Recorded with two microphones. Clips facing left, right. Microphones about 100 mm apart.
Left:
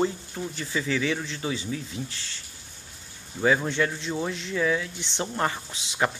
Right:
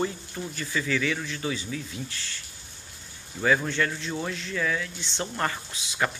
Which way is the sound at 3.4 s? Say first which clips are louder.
Left 1 dB; 20° left (ahead or behind).